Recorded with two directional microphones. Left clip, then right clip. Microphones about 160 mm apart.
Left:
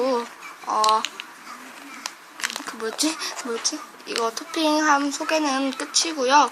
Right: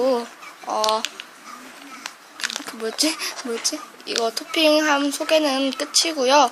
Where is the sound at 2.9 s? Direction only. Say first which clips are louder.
Right 4 dB; 25° right (ahead or behind).